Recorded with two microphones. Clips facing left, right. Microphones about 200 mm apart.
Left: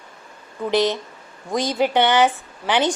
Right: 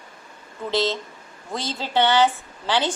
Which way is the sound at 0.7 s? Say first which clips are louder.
Left 4 dB; 15° left (ahead or behind).